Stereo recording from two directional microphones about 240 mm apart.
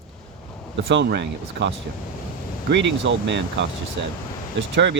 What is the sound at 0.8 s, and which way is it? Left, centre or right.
Speech, right.